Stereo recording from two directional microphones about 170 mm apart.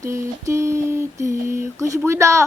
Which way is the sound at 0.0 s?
15° right (ahead or behind).